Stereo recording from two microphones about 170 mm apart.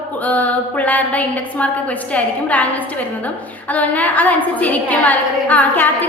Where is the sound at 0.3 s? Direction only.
10° left (ahead or behind).